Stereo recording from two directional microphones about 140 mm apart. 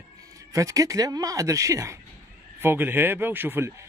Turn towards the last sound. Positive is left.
turn(degrees=-15)  # may be behind; listen again after turning